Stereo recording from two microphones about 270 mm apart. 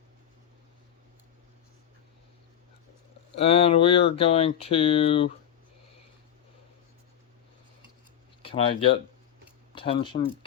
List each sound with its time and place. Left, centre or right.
3.3 s speech: left
8.4 s speech: left